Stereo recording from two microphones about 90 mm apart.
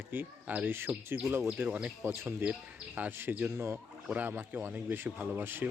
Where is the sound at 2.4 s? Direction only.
15° right (ahead or behind).